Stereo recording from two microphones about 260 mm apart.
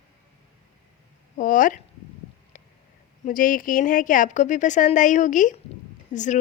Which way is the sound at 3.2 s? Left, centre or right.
Left.